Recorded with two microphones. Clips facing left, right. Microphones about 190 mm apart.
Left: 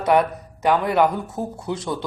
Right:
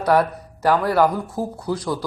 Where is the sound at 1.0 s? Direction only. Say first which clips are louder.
Right 1 dB; centre (ahead or behind).